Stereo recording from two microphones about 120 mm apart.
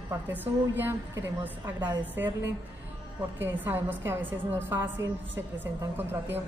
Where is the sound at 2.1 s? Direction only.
15° right (ahead or behind).